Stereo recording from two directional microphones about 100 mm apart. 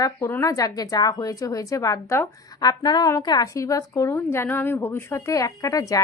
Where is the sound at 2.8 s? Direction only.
45° left (ahead or behind).